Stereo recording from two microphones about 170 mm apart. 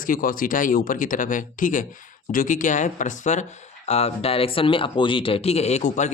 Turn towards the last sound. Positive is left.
turn(degrees=45)  # may be behind; listen again after turning